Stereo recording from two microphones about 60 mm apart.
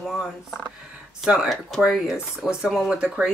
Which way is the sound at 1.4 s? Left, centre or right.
Centre.